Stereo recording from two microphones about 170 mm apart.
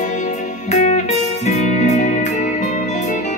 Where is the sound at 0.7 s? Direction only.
40° left (ahead or behind).